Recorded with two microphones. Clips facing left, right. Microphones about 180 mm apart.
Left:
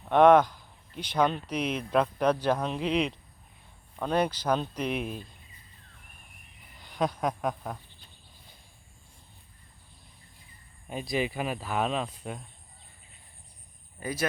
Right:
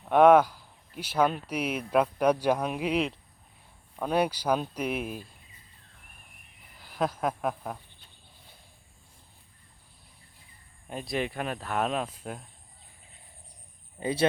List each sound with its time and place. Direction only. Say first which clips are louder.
0.1 s speech: even; 5° right (ahead or behind)
6.7 s speech: even; 5° right (ahead or behind)
10.8 s speech: left 1 dB; centre (ahead or behind)
14.0 s speech: right 5 dB; 25° right (ahead or behind)